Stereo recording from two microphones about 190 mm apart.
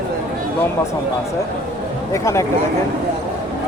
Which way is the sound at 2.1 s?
15° left (ahead or behind).